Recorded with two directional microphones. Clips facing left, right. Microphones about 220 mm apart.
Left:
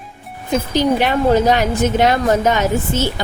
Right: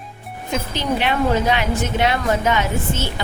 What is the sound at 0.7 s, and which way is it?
A woman's voice, 40° left (ahead or behind).